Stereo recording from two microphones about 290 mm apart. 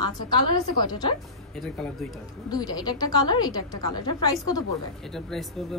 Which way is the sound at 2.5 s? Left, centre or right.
Centre.